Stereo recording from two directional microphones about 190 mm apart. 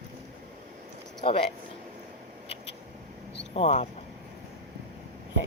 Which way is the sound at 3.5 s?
35° left (ahead or behind).